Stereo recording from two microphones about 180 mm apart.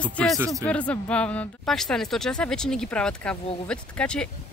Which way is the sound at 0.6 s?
5° left (ahead or behind).